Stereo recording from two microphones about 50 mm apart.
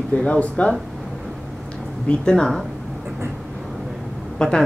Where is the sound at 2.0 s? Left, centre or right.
Centre.